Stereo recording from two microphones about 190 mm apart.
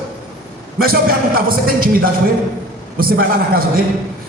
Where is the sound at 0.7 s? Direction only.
50° right (ahead or behind).